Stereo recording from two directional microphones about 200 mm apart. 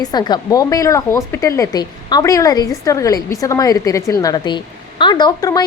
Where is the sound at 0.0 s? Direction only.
20° left (ahead or behind).